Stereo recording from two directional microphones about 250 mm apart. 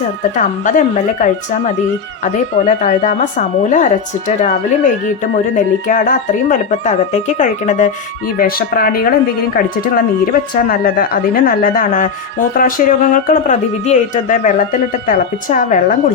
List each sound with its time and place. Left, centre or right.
0.3 s speech: left
2.2 s speech: left